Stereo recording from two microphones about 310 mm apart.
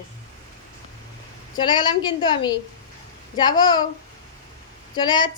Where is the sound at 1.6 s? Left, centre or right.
Centre.